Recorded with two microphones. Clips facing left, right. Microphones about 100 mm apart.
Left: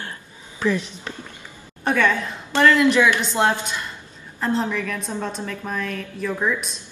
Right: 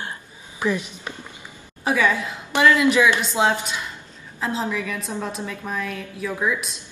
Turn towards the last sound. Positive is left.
turn(degrees=-5)  # may be behind; listen again after turning